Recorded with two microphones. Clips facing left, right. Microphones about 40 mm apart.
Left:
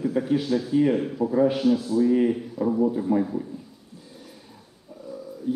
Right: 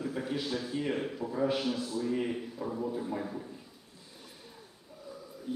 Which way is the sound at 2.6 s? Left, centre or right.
Left.